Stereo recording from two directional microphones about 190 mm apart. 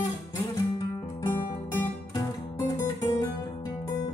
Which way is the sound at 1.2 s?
15° left (ahead or behind).